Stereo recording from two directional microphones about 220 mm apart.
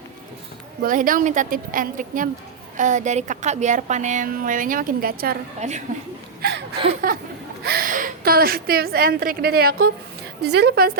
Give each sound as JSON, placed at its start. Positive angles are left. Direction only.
{"t": 0.8, "sound": "a woman's voice", "side_deg": -40}
{"t": 7.0, "sound": "a woman's voice", "side_deg": -40}